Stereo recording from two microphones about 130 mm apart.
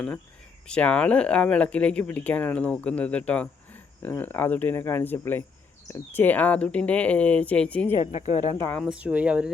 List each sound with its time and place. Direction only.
0.7 s speech: 10° left (ahead or behind)
8.0 s speech: 60° left (ahead or behind)
8.8 s speech: 10° right (ahead or behind)